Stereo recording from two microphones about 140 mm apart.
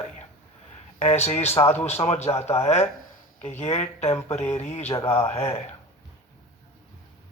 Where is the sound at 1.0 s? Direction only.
50° left (ahead or behind).